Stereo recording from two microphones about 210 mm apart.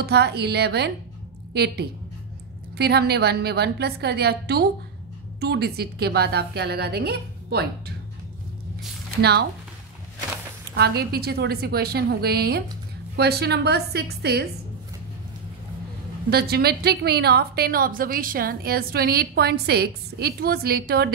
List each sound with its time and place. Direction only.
0.0 s a woman's voice: 50° right (ahead or behind)
9.2 s a woman's voice: 50° right (ahead or behind)
10.8 s a woman's voice: 50° right (ahead or behind)
16.3 s a woman's voice: 50° right (ahead or behind)